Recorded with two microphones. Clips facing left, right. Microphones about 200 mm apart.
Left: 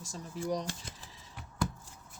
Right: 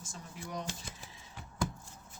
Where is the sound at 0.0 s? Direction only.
40° left (ahead or behind).